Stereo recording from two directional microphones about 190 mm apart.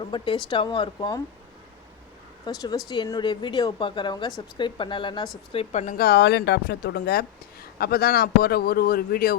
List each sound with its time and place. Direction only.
0.0 s a woman's voice: 25° left (ahead or behind)
2.9 s a woman's voice: 20° left (ahead or behind)
5.8 s a woman's voice: 45° left (ahead or behind)